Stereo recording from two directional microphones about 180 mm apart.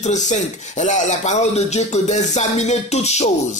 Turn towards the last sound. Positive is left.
turn(degrees=40)  # may be behind; listen again after turning